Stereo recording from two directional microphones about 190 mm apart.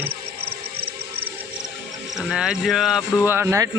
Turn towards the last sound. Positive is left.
turn(degrees=-15)  # may be behind; listen again after turning